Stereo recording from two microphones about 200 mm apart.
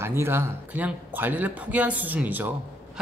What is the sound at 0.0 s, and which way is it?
A man's voice, 10° right (ahead or behind).